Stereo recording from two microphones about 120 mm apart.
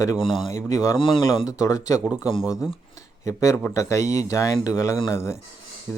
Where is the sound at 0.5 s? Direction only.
30° left (ahead or behind).